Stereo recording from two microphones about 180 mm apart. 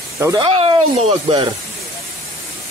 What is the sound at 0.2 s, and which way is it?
Speech, 20° right (ahead or behind).